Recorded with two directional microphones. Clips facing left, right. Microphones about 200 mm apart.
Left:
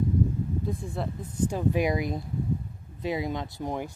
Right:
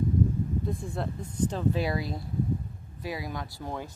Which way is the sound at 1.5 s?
15° left (ahead or behind).